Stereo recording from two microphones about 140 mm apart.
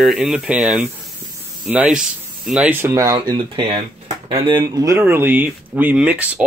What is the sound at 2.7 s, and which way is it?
Speech, 20° right (ahead or behind).